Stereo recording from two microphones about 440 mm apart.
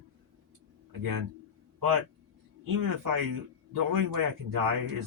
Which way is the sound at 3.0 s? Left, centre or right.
Right.